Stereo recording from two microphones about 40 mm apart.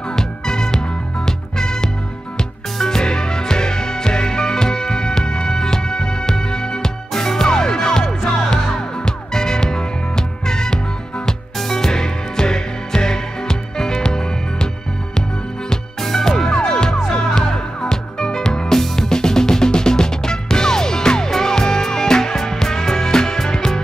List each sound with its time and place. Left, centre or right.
0.1 s music: centre
15.7 s music: centre
16.4 s music: centre